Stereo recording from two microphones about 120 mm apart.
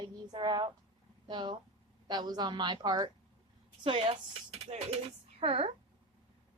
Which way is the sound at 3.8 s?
50° right (ahead or behind).